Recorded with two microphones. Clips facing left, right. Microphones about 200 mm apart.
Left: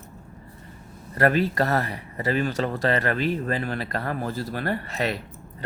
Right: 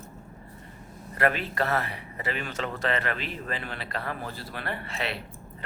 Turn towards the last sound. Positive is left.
turn(degrees=40)  # may be behind; listen again after turning